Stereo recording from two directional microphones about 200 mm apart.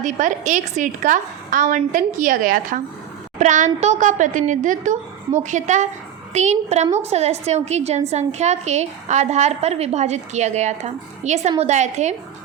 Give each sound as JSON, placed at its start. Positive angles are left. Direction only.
{"t": 0.0, "sound": "a woman's voice", "side_deg": -40}